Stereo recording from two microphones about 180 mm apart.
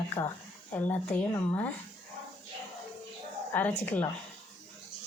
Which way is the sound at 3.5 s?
10° left (ahead or behind).